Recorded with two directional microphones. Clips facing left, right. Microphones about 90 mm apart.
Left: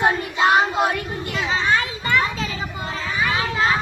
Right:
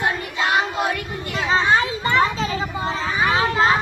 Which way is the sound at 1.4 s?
35° right (ahead or behind).